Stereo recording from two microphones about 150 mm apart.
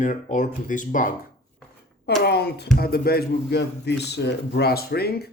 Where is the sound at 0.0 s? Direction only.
55° left (ahead or behind).